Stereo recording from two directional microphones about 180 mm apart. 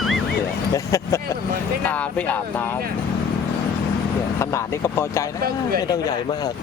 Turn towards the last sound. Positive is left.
turn(degrees=15)  # may be behind; listen again after turning